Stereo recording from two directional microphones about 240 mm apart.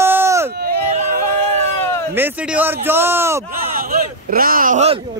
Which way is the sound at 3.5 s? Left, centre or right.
Right.